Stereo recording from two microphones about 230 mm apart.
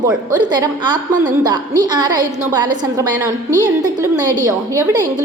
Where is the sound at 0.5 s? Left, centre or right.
Centre.